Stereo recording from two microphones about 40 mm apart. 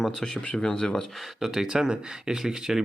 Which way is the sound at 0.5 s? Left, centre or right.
Centre.